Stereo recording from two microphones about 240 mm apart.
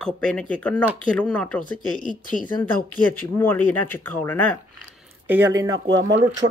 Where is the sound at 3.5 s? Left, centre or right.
Centre.